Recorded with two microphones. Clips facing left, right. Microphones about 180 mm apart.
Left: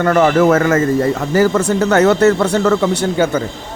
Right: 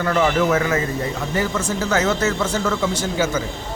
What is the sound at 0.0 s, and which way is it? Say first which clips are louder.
Speech: left 7 dB; 60° left (ahead or behind).